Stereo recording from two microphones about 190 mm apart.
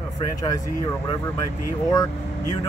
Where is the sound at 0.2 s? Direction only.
20° left (ahead or behind).